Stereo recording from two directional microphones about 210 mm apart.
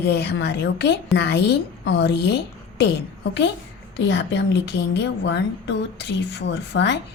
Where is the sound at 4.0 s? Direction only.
55° left (ahead or behind).